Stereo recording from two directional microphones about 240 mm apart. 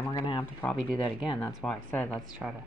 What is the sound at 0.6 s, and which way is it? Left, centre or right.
Speech, centre.